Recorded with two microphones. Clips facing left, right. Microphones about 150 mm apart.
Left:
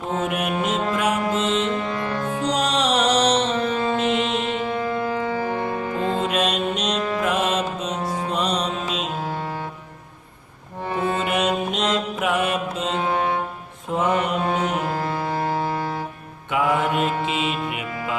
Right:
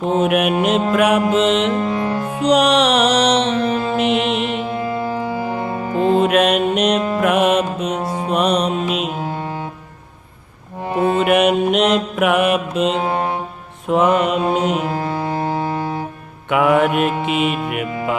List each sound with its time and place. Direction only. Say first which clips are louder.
0.2 s music: right 7 dB; 70° right (ahead or behind)
1.9 s music: right 6 dB; 30° right (ahead or behind)
2.1 s music: right 3 dB; 10° right (ahead or behind)
2.4 s music: right 9 dB; 70° right (ahead or behind)
4.9 s music: right 2 dB; 10° right (ahead or behind)
6.1 s music: right 10 dB; 65° right (ahead or behind)
11.2 s music: right 8 dB; 65° right (ahead or behind)
13.8 s mantra: right 7 dB; 75° right (ahead or behind)
14.4 s music: right 5 dB; 20° right (ahead or behind)
16.5 s music: right 6 dB; 70° right (ahead or behind)